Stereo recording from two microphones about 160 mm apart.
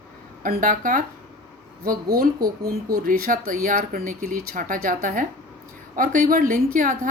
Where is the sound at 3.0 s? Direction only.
60° right (ahead or behind).